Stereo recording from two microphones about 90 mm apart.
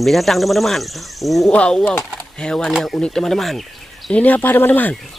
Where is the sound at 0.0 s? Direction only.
Centre (ahead or behind).